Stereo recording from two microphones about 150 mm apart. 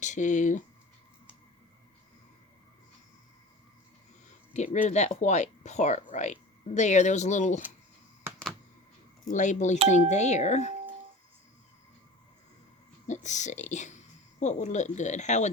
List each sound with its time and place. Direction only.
0.0 s speech: 55° left (ahead or behind)
4.5 s speech: 50° left (ahead or behind)
9.3 s speech: 55° left (ahead or behind)
13.1 s speech: 50° left (ahead or behind)